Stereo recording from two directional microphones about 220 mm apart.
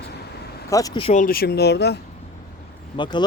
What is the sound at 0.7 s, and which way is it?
Speech, 15° left (ahead or behind).